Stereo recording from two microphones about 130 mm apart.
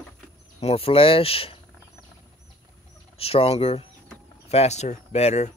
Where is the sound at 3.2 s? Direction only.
50° left (ahead or behind).